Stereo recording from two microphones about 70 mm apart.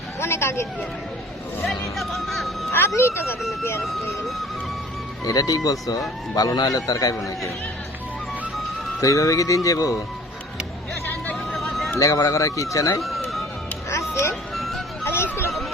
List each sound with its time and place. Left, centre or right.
0.2 s speech: left
1.6 s speech: centre
2.7 s speech: left
3.8 s speech: centre
5.2 s a man's voice: left
6.3 s a man's voice: left
9.0 s speech: left
11.9 s speech: left
13.0 s music: centre
14.5 s music: centre
15.0 s music: left